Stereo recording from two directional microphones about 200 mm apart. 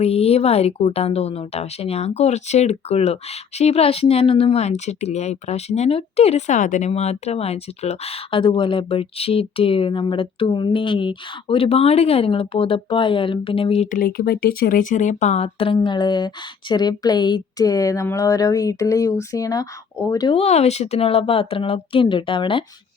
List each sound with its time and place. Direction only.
0.0 s a woman's voice: 30° left (ahead or behind)